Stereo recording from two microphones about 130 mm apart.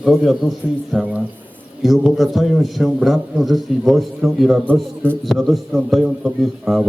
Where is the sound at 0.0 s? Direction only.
Centre (ahead or behind).